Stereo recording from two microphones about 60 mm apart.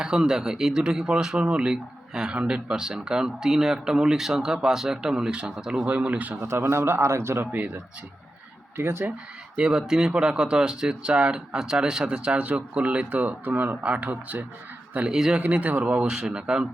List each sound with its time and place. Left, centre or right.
0.0 s speech: centre
5.9 s speech: right
6.4 s a man's voice: right
7.5 s speech: right
8.7 s speech: right
9.6 s speech: centre
15.1 s speech: centre
15.4 s speech: right
16.0 s speech: centre